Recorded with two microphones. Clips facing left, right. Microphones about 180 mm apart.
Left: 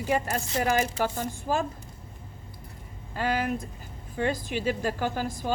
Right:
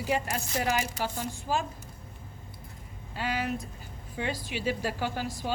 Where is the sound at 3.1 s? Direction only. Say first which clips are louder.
Left 4 dB; 50° left (ahead or behind).